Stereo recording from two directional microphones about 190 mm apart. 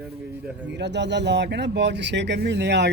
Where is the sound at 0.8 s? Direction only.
65° right (ahead or behind).